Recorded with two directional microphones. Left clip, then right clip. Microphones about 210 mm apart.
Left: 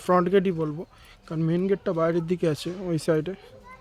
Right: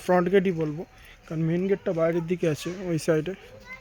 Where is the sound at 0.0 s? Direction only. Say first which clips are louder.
Even; 5° left (ahead or behind).